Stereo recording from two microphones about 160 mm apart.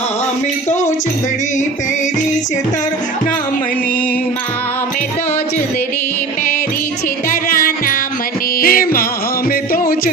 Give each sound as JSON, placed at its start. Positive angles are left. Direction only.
{"t": 7.3, "sound": "music", "side_deg": 60}